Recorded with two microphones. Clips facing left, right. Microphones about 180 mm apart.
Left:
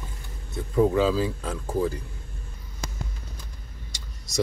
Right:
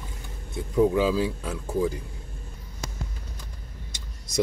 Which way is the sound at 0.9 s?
10° right (ahead or behind).